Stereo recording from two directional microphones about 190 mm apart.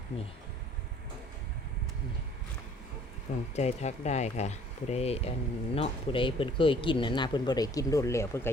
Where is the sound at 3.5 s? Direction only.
35° left (ahead or behind).